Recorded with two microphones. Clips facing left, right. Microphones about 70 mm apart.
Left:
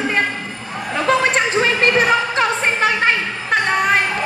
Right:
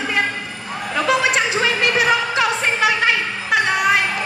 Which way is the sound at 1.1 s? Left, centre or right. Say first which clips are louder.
Left 2 dB; left.